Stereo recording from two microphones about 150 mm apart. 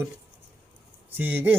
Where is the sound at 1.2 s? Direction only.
10° right (ahead or behind).